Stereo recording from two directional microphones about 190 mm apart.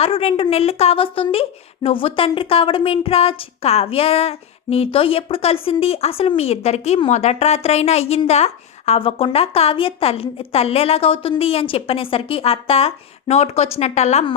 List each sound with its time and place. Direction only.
0.0 s a woman's voice: 30° left (ahead or behind)